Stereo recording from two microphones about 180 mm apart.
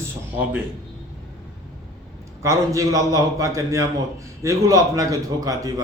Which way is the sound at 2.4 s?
20° right (ahead or behind).